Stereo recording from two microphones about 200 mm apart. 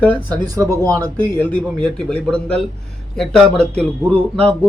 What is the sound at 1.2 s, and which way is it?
Speech, 10° left (ahead or behind).